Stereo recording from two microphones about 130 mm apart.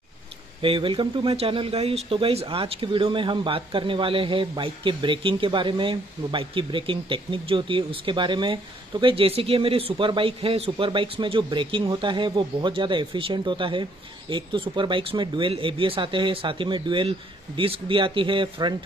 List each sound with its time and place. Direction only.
0.6 s speech: 40° right (ahead or behind)